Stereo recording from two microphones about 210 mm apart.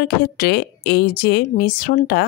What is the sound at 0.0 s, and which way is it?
Speech, 50° left (ahead or behind).